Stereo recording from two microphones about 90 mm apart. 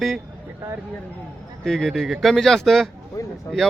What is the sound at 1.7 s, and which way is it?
Speech, 5° left (ahead or behind).